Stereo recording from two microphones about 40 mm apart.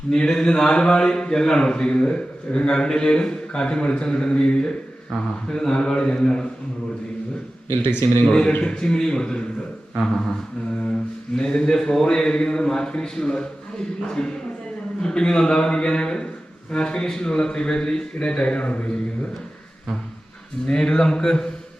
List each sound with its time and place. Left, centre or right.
0.3 s a man's voice: centre
7.7 s speech: left
8.3 s a man's voice: left
11.3 s a man's voice: centre
20.7 s a man's voice: centre